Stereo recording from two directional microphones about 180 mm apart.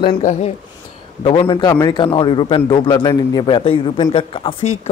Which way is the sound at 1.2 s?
25° left (ahead or behind).